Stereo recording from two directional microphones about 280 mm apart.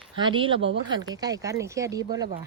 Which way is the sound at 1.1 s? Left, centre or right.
Centre.